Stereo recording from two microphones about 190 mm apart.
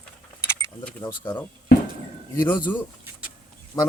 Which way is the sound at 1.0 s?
20° left (ahead or behind).